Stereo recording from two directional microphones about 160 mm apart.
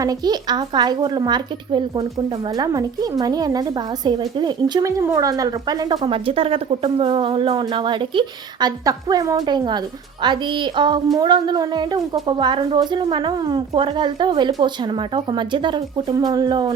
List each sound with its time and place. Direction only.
0.0 s a woman's voice: 25° right (ahead or behind)